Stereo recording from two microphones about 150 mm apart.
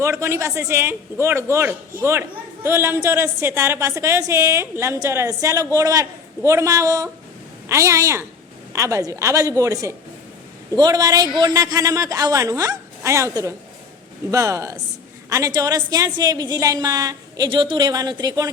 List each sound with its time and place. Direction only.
0.0 s a man's voice: 20° right (ahead or behind)